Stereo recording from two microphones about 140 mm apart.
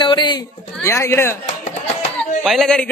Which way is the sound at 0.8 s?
20° left (ahead or behind).